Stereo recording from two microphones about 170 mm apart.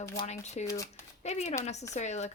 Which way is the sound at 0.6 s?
20° left (ahead or behind).